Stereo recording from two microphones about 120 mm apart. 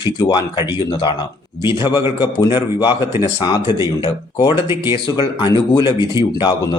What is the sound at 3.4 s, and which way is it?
Speech, 35° left (ahead or behind).